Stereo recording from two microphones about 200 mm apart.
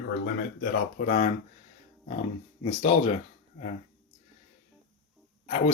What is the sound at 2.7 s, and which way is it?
Speech, 30° left (ahead or behind).